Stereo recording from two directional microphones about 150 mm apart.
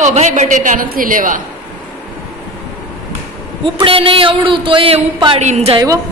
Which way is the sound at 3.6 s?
35° right (ahead or behind).